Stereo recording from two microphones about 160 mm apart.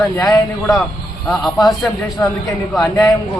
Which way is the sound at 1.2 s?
Centre (ahead or behind).